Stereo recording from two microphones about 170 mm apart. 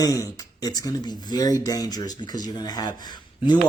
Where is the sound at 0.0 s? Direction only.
20° left (ahead or behind).